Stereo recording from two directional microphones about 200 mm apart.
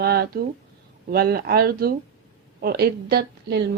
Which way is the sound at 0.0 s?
50° right (ahead or behind).